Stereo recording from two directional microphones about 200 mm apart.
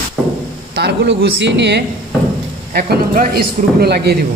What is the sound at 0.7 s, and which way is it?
A man's voice, 55° right (ahead or behind).